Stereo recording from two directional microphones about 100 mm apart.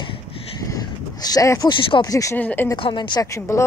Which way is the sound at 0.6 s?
35° left (ahead or behind).